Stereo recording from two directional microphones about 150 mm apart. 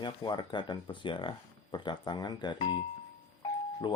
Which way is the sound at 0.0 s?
30° left (ahead or behind).